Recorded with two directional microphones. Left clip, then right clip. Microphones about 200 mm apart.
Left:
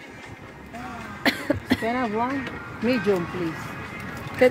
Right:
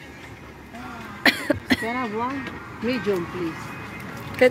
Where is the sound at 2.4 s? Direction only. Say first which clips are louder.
Left 2 dB; 60° left (ahead or behind).